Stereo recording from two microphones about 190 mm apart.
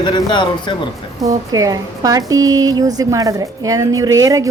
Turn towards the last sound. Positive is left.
turn(degrees=-15)  # may be behind; listen again after turning